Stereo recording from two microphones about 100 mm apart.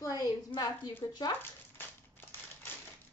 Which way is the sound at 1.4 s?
20° left (ahead or behind).